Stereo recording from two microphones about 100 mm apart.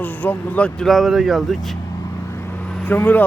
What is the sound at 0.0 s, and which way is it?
Speech, 15° left (ahead or behind).